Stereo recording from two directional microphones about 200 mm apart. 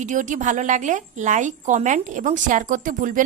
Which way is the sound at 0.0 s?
40° right (ahead or behind).